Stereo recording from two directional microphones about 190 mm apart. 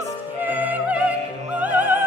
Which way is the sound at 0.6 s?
5° right (ahead or behind).